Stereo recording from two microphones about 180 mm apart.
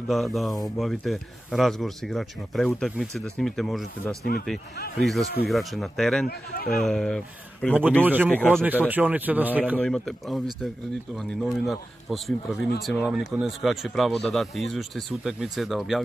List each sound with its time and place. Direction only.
0.1 s speech: centre (ahead or behind)
5.0 s speech: centre (ahead or behind)
6.2 s speech: 60° left (ahead or behind)
6.7 s speech: centre (ahead or behind)
8.3 s speech: 5° left (ahead or behind)
8.6 s speech: 10° right (ahead or behind)
9.8 s speech: 5° left (ahead or behind)